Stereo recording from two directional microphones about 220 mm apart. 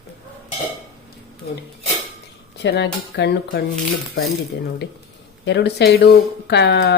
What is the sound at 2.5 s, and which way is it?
Speech, 50° left (ahead or behind).